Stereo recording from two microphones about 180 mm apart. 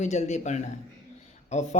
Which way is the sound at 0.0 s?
40° left (ahead or behind).